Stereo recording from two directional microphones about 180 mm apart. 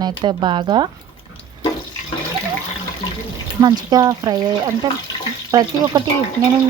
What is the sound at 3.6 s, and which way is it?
Speech, 25° right (ahead or behind).